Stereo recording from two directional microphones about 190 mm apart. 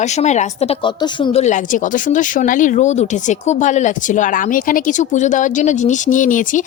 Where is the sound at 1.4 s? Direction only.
40° left (ahead or behind).